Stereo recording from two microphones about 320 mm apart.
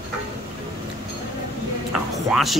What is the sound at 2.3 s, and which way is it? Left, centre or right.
Music, centre.